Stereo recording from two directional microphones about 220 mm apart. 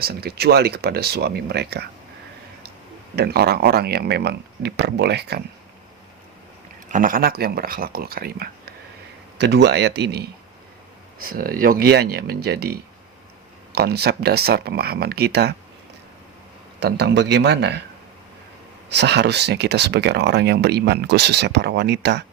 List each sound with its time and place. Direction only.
0.0 s speech: 45° right (ahead or behind)
3.2 s speech: 45° right (ahead or behind)
6.8 s speech: 35° right (ahead or behind)
16.8 s speech: 50° right (ahead or behind)
18.9 s speech: 50° right (ahead or behind)